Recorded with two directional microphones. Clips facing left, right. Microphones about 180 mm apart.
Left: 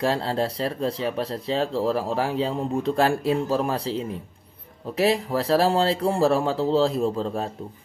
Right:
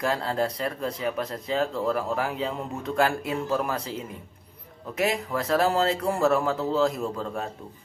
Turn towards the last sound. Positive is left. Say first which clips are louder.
# left 6 dB
turn(degrees=30)  # may be behind; listen again after turning